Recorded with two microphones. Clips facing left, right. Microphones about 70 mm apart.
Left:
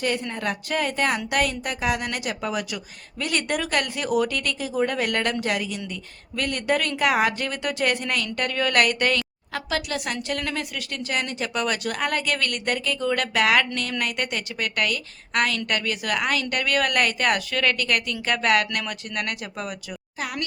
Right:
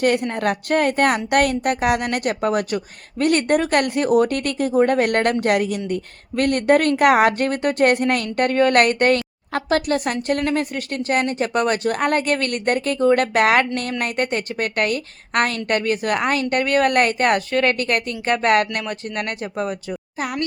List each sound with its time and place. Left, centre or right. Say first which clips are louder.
0.0 s a woman's voice: right 7 dB; right